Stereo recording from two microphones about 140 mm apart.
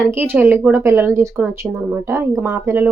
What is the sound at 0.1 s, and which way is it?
Speech, 15° right (ahead or behind).